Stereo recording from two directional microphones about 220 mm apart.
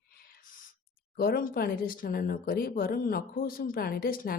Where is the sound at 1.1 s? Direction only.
45° left (ahead or behind).